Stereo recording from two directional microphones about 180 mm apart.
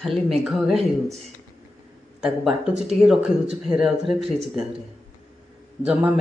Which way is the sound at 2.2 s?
5° right (ahead or behind).